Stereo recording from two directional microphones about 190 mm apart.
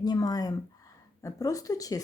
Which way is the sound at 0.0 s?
20° left (ahead or behind).